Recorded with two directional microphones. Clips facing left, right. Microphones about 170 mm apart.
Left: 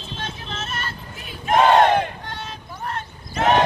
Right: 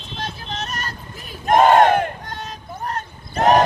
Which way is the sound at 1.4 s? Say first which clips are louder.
Right 2 dB; 45° right (ahead or behind).